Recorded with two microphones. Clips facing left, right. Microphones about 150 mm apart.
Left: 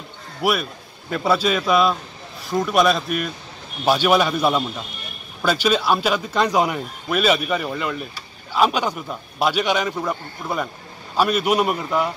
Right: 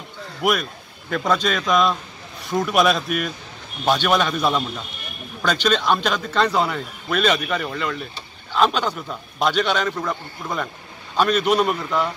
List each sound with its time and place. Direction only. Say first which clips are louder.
0.4 s a man's voice: even; 5° left (ahead or behind)
3.8 s a man's voice: left 2 dB; 10° left (ahead or behind)